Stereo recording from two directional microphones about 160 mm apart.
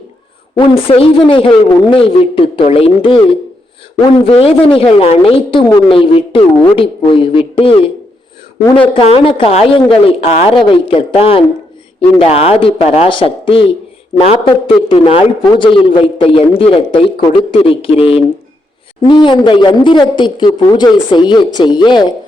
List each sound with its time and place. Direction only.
0.5 s a man's voice: 35° left (ahead or behind)
8.9 s a man's voice: 40° left (ahead or behind)